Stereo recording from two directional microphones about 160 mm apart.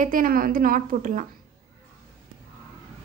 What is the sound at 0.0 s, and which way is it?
A woman's voice, 60° right (ahead or behind).